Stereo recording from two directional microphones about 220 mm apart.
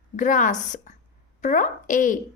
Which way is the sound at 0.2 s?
35° left (ahead or behind).